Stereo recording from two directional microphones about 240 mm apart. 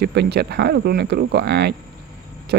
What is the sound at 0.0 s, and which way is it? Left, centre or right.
Speech, right.